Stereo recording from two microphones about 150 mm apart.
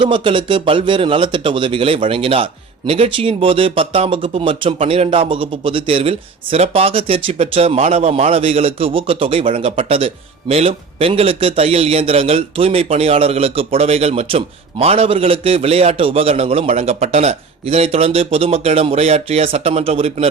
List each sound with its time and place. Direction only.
0.0 s speech: 35° right (ahead or behind)